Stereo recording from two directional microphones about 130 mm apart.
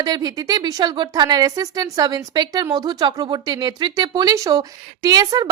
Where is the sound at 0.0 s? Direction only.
30° right (ahead or behind).